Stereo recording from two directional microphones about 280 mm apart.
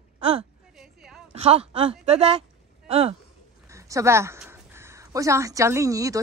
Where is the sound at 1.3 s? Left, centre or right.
Right.